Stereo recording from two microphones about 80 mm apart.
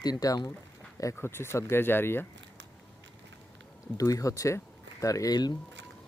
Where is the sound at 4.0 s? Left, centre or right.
Left.